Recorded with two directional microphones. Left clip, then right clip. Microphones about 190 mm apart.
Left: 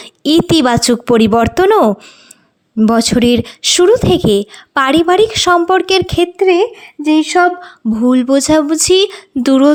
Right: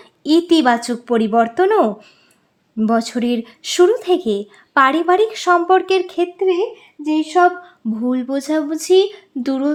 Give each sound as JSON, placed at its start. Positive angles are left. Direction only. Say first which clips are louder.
{"t": 0.0, "sound": "a woman's voice", "louder": "left 4 dB", "side_deg": 35}
{"t": 6.3, "sound": "speech", "louder": "left 7 dB", "side_deg": 55}
{"t": 7.3, "sound": "speech", "louder": "left 3 dB", "side_deg": 40}